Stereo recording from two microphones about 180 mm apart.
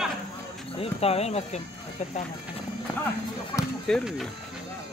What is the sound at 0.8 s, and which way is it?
Speech, 35° left (ahead or behind).